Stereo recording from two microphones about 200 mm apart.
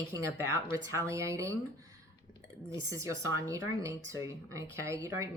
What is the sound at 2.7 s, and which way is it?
A woman's voice, 15° right (ahead or behind).